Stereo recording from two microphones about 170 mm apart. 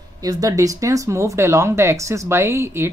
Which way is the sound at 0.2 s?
20° right (ahead or behind).